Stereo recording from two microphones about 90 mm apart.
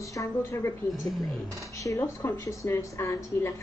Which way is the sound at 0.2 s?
30° left (ahead or behind).